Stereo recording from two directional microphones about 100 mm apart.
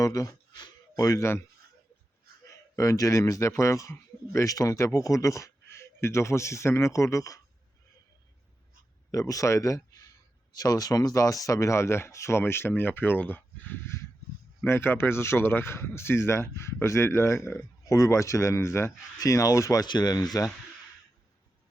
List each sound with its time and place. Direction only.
0.0 s speech: 35° left (ahead or behind)
2.7 s speech: 35° left (ahead or behind)
9.1 s speech: 35° left (ahead or behind)
19.8 s speech: 45° left (ahead or behind)